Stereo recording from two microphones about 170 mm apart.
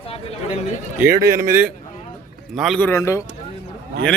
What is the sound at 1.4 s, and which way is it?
Speech, 15° right (ahead or behind).